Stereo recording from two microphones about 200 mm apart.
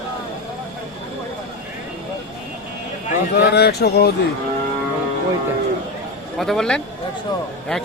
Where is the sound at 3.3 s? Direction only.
55° left (ahead or behind).